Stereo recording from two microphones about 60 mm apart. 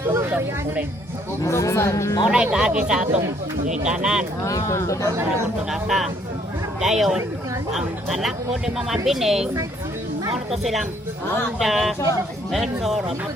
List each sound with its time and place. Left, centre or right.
0.1 s music: right
1.5 s speech: left
2.3 s speech: centre
4.4 s speech: left
5.7 s speech: centre
10.5 s speech: centre